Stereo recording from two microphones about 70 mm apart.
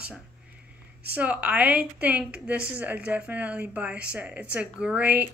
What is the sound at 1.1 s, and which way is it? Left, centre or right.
A woman's voice, right.